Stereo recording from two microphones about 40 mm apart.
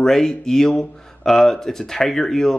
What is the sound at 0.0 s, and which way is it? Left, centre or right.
Speech, centre.